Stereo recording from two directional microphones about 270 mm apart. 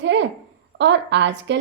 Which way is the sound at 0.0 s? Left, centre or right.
Right.